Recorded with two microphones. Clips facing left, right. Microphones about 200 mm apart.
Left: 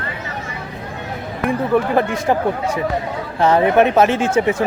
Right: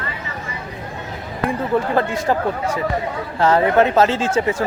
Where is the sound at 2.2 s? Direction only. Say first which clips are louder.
Left 2 dB; 15° left (ahead or behind).